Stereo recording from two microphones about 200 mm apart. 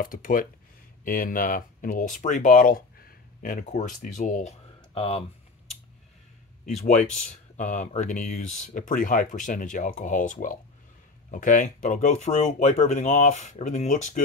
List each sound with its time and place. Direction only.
0.0 s speech: 45° left (ahead or behind)
7.5 s speech: 40° left (ahead or behind)